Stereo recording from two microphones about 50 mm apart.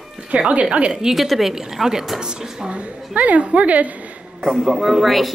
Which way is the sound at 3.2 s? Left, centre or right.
Right.